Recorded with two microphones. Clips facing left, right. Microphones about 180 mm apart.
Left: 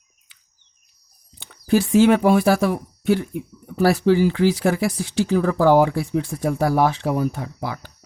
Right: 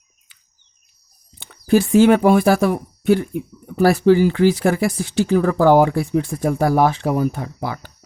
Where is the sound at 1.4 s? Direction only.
50° right (ahead or behind).